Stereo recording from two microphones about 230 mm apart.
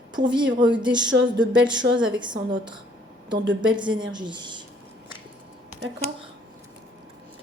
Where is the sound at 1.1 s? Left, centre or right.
Right.